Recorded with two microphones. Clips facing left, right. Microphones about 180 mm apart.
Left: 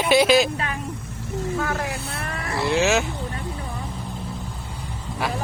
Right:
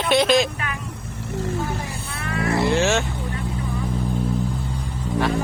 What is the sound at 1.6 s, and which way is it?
Vehicle, 75° left (ahead or behind).